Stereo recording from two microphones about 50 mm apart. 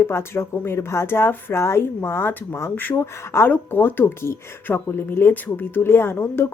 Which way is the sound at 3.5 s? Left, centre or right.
Left.